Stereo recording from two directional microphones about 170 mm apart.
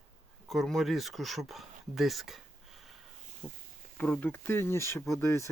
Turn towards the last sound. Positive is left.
turn(degrees=15)  # may be behind; listen again after turning